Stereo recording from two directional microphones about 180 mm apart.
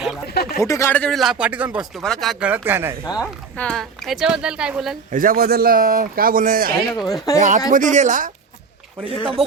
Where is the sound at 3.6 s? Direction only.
5° left (ahead or behind).